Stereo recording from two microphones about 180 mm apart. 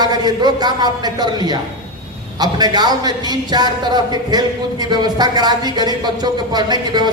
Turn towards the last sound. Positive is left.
turn(degrees=-25)  # may be behind; listen again after turning